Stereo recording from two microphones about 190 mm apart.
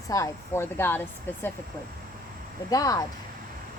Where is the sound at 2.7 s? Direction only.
20° left (ahead or behind).